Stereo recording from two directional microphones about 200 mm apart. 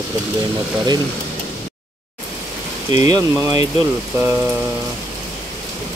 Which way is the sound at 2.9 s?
20° right (ahead or behind).